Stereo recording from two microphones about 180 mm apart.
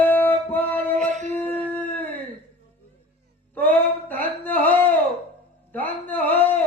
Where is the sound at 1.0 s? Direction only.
40° right (ahead or behind).